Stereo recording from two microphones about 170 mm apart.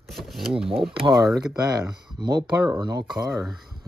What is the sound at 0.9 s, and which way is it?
Speech, 25° right (ahead or behind).